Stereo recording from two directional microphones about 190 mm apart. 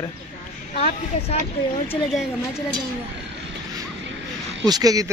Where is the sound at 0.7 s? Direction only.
35° left (ahead or behind).